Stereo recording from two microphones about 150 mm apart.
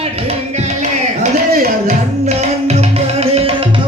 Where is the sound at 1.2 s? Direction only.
60° right (ahead or behind).